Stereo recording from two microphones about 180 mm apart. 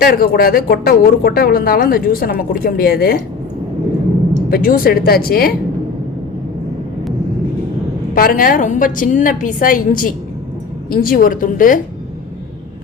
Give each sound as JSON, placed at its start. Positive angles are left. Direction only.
{"t": 0.0, "sound": "speech", "side_deg": 55}
{"t": 4.4, "sound": "speech", "side_deg": 55}
{"t": 8.1, "sound": "a woman's voice", "side_deg": 50}